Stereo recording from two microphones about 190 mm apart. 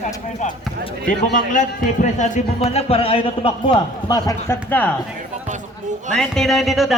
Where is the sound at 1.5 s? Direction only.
40° left (ahead or behind); by 4.9 s 10° left (ahead or behind).